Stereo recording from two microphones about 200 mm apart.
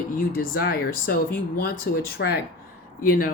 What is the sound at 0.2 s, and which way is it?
Speech, 45° left (ahead or behind).